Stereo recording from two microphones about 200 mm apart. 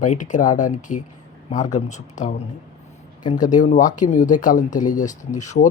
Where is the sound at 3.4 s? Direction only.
35° left (ahead or behind).